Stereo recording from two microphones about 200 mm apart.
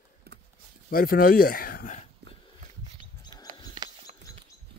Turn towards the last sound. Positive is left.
turn(degrees=-25)  # may be behind; listen again after turning